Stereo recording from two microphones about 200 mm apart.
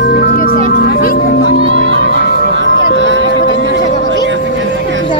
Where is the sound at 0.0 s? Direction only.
55° left (ahead or behind).